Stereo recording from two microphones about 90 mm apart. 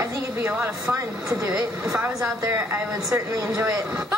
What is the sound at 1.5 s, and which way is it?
Speech, 10° right (ahead or behind).